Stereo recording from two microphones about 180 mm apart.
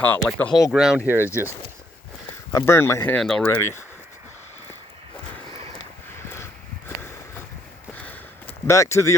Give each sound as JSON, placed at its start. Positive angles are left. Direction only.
{"t": 0.0, "sound": "speech", "side_deg": 10}
{"t": 2.5, "sound": "speech", "side_deg": 15}
{"t": 3.6, "sound": "speech", "side_deg": 15}
{"t": 6.3, "sound": "a sound", "side_deg": 15}